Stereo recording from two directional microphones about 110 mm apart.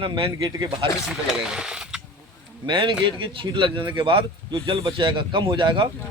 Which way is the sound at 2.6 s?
45° right (ahead or behind).